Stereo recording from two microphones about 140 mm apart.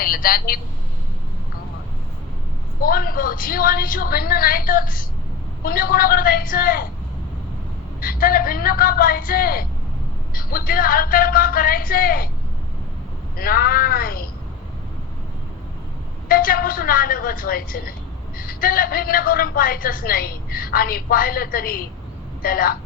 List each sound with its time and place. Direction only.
0.0 s a woman's voice: 90° left
2.8 s a woman's voice: 90° left
8.0 s a woman's voice: 90° left
13.3 s a woman's voice: 90° left
16.3 s a woman's voice: 90° left